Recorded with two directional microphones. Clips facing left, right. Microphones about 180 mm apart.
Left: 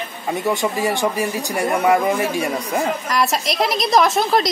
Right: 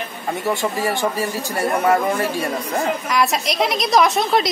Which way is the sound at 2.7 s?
Centre (ahead or behind).